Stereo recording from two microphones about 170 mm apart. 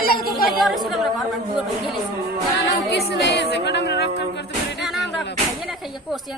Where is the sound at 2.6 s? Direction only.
90° left.